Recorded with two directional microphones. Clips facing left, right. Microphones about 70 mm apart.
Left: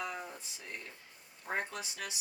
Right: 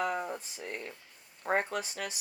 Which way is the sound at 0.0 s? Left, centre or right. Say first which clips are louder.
Right 8 dB; right.